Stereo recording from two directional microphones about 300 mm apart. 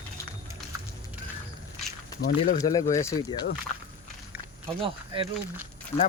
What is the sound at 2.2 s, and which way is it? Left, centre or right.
Speech, left.